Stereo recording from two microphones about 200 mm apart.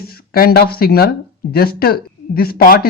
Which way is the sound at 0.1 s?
50° left (ahead or behind).